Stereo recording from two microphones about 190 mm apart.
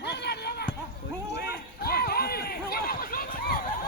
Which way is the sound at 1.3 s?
55° left (ahead or behind).